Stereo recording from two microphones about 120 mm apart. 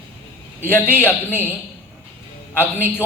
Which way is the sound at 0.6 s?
20° left (ahead or behind).